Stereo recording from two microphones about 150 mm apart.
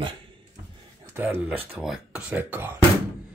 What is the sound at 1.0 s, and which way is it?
Speech, 15° right (ahead or behind).